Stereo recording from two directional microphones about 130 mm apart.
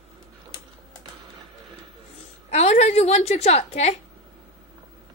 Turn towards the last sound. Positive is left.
turn(degrees=55)  # may be behind; listen again after turning